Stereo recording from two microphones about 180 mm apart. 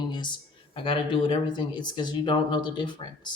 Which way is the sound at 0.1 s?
25° left (ahead or behind).